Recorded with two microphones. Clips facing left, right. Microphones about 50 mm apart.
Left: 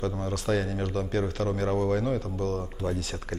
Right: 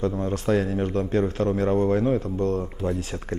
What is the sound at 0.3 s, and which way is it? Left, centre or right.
A man's voice, right.